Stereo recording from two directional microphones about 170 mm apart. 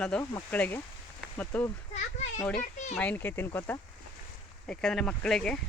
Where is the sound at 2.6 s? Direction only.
45° left (ahead or behind).